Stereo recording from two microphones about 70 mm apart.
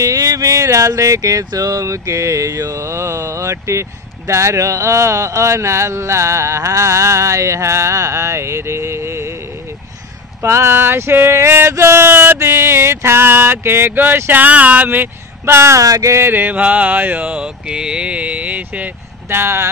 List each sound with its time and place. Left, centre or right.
0.0 s speech: right
10.4 s male singing: right
14.4 s speech: right
15.4 s speech: right
15.8 s a sound: right
16.2 s mantra: right